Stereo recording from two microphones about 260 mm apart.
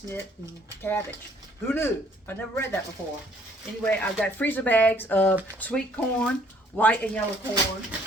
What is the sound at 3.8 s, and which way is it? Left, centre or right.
Speech, centre.